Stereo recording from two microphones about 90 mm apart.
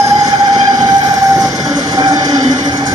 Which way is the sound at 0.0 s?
40° right (ahead or behind).